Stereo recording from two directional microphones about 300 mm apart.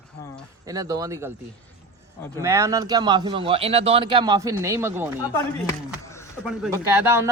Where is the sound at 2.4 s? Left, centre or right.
Centre.